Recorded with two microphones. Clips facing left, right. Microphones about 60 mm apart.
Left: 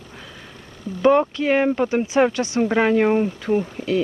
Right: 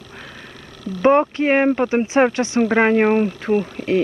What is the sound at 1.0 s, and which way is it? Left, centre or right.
Speech, right.